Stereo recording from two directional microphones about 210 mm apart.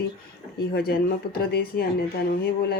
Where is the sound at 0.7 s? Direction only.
45° left (ahead or behind).